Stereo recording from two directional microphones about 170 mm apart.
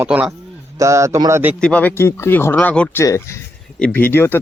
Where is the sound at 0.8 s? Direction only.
20° right (ahead or behind).